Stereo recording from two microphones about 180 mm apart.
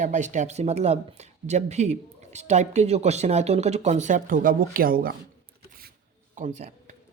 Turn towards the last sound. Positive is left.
turn(degrees=-40)  # may be behind; listen again after turning